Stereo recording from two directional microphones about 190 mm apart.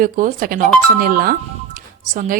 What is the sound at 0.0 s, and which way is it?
Speech, 45° right (ahead or behind).